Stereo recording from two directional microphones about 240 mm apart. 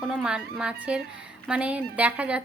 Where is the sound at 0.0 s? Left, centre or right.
Centre.